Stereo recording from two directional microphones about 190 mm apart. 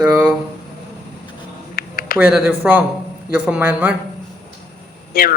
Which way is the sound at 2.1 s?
5° right (ahead or behind).